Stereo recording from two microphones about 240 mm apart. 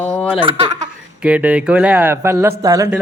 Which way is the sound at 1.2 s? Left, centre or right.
Centre.